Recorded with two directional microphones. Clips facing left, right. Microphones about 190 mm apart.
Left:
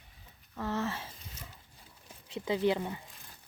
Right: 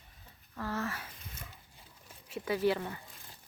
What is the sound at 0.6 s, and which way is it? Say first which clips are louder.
Speech: left 3 dB; 20° left (ahead or behind).